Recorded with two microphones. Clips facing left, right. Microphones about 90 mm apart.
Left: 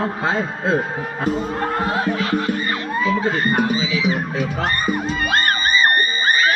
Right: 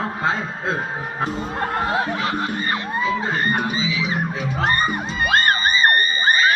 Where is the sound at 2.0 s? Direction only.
30° right (ahead or behind).